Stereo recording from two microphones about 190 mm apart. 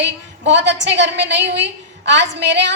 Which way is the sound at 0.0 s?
70° right (ahead or behind).